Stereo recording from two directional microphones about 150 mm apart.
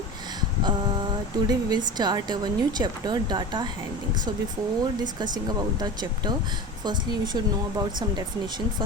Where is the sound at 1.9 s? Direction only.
30° right (ahead or behind).